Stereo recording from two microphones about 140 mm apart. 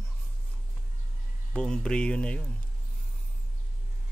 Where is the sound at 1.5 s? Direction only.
5° left (ahead or behind).